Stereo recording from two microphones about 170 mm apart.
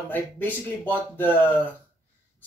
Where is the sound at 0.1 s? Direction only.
10° left (ahead or behind).